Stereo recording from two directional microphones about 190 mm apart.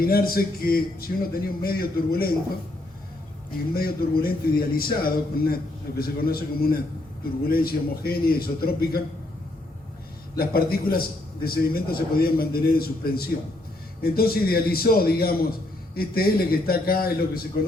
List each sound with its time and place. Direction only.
0.0 s a man's voice: 50° left (ahead or behind)
3.8 s a man's voice: 55° left (ahead or behind)
10.3 s a man's voice: 50° left (ahead or behind)